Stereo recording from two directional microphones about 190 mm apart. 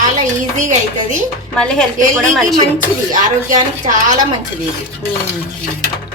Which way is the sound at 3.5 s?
40° right (ahead or behind).